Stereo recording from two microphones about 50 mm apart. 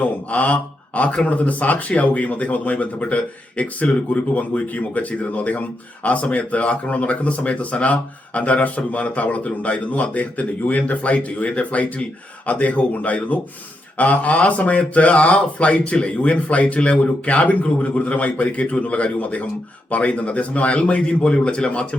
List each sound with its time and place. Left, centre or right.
0.0 s speech: left